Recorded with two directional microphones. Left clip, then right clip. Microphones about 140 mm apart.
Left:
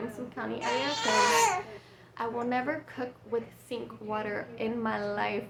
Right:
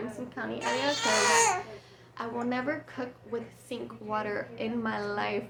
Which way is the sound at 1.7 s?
15° left (ahead or behind).